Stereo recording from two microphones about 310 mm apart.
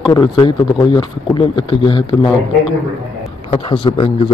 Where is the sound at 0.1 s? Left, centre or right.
Centre.